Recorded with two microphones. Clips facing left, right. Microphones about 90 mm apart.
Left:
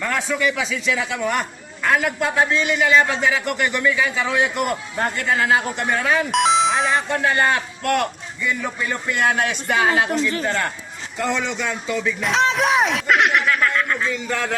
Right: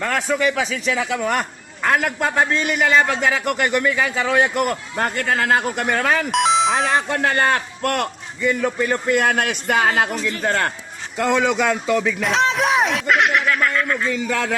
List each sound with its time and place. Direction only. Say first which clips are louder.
0.0 s speech: right 2 dB; 45° right (ahead or behind)
6.3 s speech: even; centre (ahead or behind)
7.1 s speech: even; 50° right (ahead or behind)
11.3 s speech: right 7 dB; 90° right
12.2 s speech: even; centre (ahead or behind)